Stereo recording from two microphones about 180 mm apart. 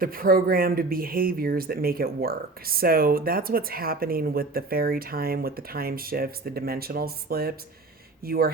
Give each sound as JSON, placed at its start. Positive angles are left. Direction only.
{"t": 0.0, "sound": "speech", "side_deg": -55}